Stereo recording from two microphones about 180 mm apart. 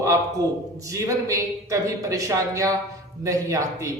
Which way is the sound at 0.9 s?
15° right (ahead or behind).